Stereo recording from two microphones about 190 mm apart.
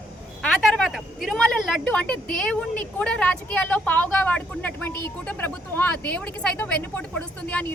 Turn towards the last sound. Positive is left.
turn(degrees=5)  # may be behind; listen again after turning